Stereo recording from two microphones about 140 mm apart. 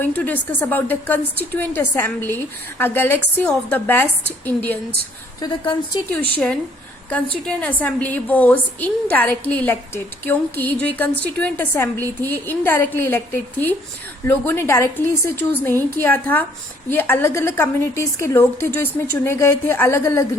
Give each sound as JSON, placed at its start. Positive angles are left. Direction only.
{"t": 0.0, "sound": "a woman's voice", "side_deg": 15}
{"t": 5.4, "sound": "a woman's voice", "side_deg": 35}
{"t": 6.1, "sound": "a woman's voice", "side_deg": 10}